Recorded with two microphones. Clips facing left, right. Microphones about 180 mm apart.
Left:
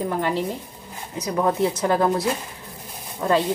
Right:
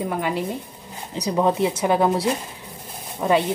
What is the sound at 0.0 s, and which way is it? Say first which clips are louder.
A woman's voice: left 1 dB; 15° right (ahead or behind).